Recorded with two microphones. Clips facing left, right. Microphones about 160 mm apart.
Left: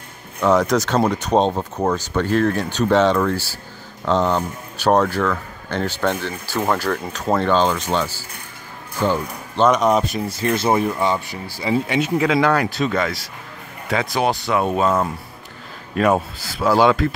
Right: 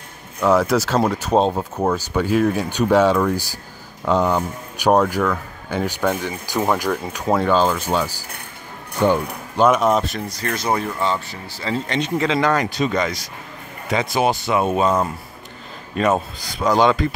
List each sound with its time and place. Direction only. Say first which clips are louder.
0.4 s speech: even; 5° right (ahead or behind)
9.7 s speech: left 1 dB; 5° right (ahead or behind)
10.3 s speech: left 4 dB; 25° left (ahead or behind); by 17.1 s 5° left (ahead or behind)